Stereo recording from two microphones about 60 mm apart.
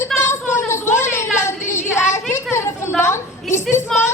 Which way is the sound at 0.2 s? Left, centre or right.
Left.